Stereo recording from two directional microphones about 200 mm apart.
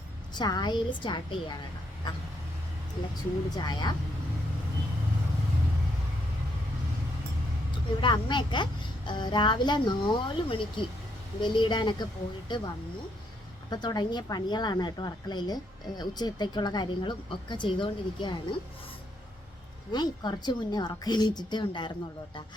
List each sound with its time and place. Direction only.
0.3 s a woman's voice: 20° left (ahead or behind)
3.5 s a woman's voice: 20° left (ahead or behind)
8.0 s a woman's voice: 20° left (ahead or behind)
19.9 s a woman's voice: 20° left (ahead or behind)